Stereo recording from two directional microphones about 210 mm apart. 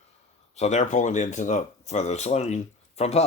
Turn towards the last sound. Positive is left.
turn(degrees=30)  # may be behind; listen again after turning